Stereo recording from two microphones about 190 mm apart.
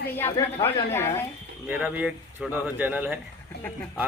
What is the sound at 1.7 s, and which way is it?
A man's voice, 5° right (ahead or behind).